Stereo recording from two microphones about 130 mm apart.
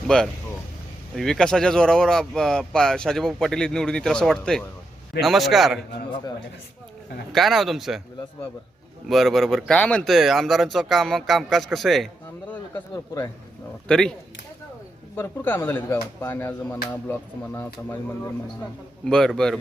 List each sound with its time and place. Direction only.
0.1 s speech: 5° left (ahead or behind)
7.3 s speech: centre (ahead or behind)
9.0 s speech: centre (ahead or behind)
13.8 s speech: 5° left (ahead or behind)
15.1 s speech: 15° left (ahead or behind)
19.0 s speech: 5° left (ahead or behind)